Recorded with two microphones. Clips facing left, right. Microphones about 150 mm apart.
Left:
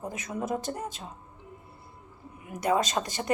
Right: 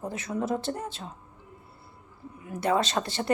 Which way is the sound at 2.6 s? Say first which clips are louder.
Even; 15° left (ahead or behind).